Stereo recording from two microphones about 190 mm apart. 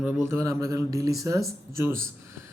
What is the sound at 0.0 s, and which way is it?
Speech, 10° right (ahead or behind).